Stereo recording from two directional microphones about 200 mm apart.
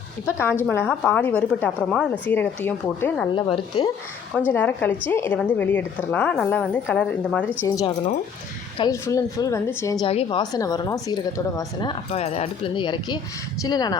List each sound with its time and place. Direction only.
0.3 s a woman's voice: 10° left (ahead or behind)
3.3 s a woman's voice: 25° left (ahead or behind)
4.5 s a woman's voice: 10° left (ahead or behind)
8.8 s a woman's voice: 15° left (ahead or behind)
10.1 s a woman's voice: 30° left (ahead or behind)